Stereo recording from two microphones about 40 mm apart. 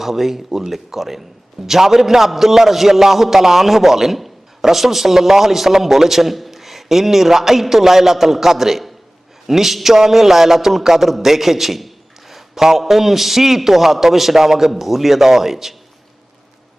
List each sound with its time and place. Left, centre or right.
0.0 s a man's voice: centre